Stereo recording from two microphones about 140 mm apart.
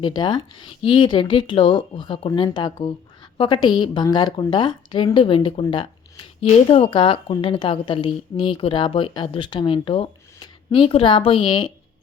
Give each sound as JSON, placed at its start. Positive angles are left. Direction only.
{"t": 0.0, "sound": "speech", "side_deg": 35}